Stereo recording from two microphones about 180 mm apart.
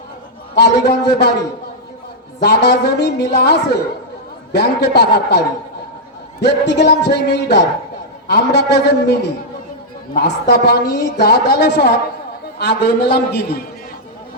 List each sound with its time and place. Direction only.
0.5 s a woman's voice: 65° left (ahead or behind)
2.4 s a woman's voice: 70° left (ahead or behind)
6.4 s a woman's voice: 70° left (ahead or behind)